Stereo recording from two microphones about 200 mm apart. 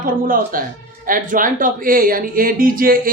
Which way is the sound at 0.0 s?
45° right (ahead or behind).